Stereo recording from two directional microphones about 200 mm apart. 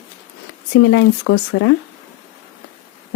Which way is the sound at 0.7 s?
85° left.